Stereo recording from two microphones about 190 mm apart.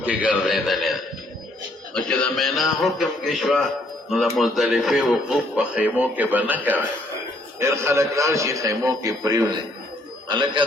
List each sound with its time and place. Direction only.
0.0 s a man's voice: 10° right (ahead or behind); by 10.6 s 25° right (ahead or behind)